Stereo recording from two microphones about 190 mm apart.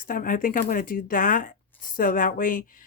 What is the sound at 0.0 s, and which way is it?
Speech, 45° left (ahead or behind).